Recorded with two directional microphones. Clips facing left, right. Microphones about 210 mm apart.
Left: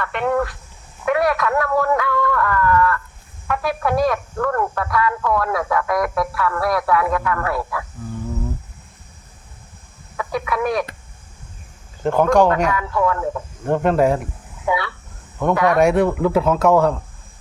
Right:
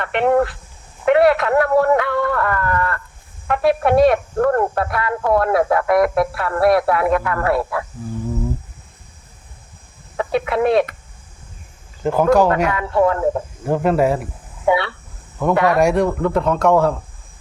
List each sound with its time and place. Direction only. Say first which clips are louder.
0.0 s speech: right 4 dB; 25° right (ahead or behind)
10.2 s chicken: right 4 dB; 25° right (ahead or behind)
12.0 s speech: right 1 dB; 5° right (ahead or behind)
12.7 s speech: right 3 dB; 30° right (ahead or behind)
13.7 s speech: even; 5° right (ahead or behind)
14.7 s speech: right 5 dB; 30° right (ahead or behind)
15.6 s speech: left 2 dB; centre (ahead or behind)